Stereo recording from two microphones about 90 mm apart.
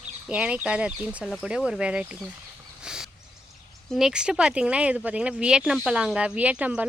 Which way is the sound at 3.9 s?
5° right (ahead or behind).